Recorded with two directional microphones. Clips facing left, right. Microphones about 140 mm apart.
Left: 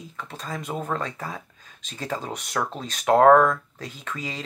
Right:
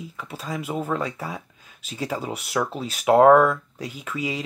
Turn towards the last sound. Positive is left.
turn(degrees=-10)  # may be behind; listen again after turning